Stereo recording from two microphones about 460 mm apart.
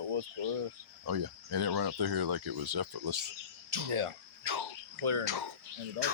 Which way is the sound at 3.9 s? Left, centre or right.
Right.